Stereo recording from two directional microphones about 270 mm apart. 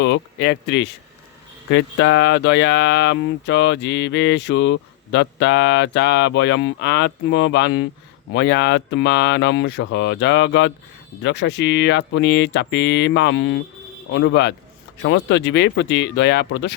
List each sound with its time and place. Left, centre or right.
0.0 s speech: left